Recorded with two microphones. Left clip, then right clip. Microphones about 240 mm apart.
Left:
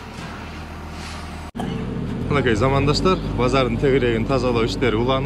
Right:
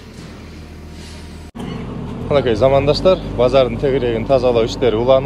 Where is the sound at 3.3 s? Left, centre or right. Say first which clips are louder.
Right 6 dB; centre.